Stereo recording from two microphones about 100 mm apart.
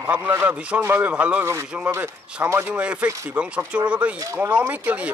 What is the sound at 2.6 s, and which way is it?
A man's voice, 10° right (ahead or behind).